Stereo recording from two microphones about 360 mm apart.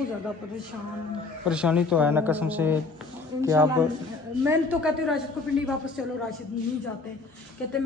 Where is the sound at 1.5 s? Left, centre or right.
Centre.